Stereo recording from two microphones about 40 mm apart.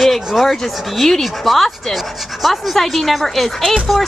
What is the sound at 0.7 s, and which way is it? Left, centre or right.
Speech, centre.